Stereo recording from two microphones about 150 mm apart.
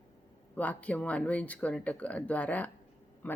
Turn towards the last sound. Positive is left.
turn(degrees=15)  # may be behind; listen again after turning